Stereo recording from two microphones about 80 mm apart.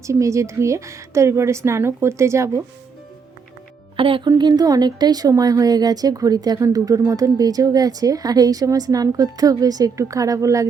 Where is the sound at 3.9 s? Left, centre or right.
Right.